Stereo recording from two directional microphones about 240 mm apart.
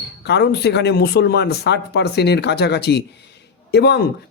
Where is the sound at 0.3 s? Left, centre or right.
Left.